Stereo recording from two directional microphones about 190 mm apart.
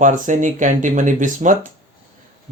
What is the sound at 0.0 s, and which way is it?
Speech, 40° right (ahead or behind).